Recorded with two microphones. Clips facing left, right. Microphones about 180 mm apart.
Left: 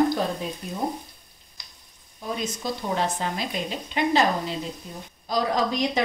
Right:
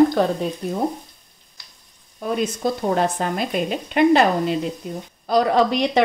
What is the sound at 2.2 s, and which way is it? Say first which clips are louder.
Speech: right 8 dB; 55° right (ahead or behind).